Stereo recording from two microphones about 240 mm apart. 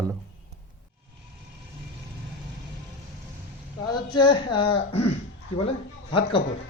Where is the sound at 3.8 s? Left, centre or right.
Centre.